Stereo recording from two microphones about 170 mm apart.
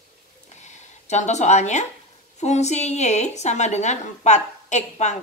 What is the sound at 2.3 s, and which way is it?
Speech, 40° left (ahead or behind).